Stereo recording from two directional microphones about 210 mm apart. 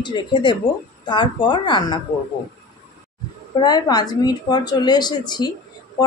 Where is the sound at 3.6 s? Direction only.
20° left (ahead or behind).